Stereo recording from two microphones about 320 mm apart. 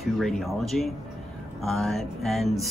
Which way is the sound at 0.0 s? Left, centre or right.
Centre.